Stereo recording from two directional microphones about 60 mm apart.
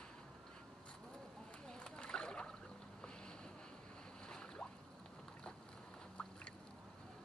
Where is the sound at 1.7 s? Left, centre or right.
Centre.